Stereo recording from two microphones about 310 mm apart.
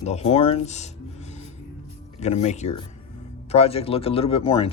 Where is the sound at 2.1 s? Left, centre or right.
Left.